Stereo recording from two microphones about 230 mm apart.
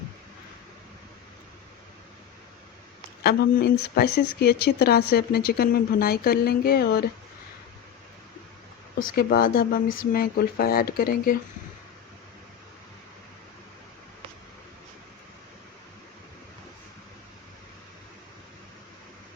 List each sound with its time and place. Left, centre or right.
3.2 s speech: left
9.1 s speech: left